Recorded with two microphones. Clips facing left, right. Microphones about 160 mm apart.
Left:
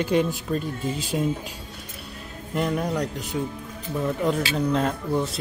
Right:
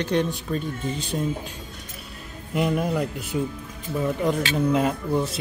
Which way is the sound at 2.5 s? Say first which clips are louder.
Right 2 dB; 5° right (ahead or behind).